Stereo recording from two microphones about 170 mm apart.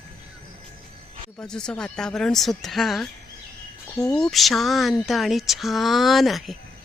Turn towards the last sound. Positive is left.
turn(degrees=0)  # may be behind; listen again after turning